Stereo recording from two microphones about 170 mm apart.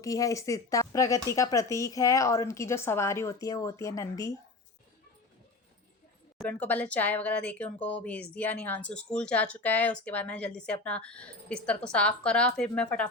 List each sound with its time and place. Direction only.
0.0 s speech: 20° left (ahead or behind)
6.5 s speech: 10° left (ahead or behind)